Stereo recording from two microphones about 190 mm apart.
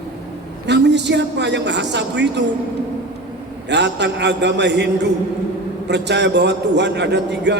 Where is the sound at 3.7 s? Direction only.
65° right (ahead or behind).